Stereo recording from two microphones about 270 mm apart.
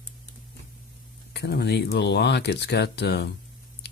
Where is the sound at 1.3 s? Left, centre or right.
Left.